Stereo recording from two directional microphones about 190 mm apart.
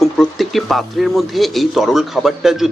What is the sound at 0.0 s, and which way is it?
Speech, centre (ahead or behind).